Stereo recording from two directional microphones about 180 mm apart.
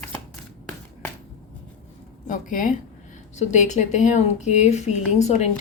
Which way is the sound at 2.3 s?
45° left (ahead or behind).